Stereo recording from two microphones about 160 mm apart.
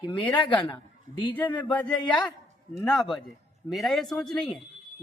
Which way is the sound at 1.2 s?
30° left (ahead or behind).